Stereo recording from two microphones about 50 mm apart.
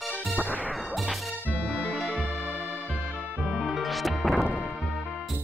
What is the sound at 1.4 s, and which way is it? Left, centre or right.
Music, left.